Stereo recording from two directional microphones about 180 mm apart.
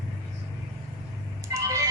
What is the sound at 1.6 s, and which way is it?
Music, 15° right (ahead or behind).